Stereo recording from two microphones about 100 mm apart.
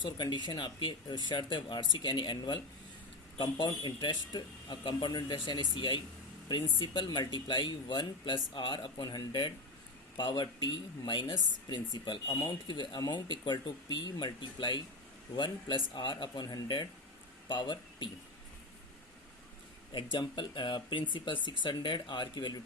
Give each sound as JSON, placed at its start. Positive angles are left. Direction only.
{"t": 0.0, "sound": "speech", "side_deg": 50}
{"t": 19.9, "sound": "speech", "side_deg": 55}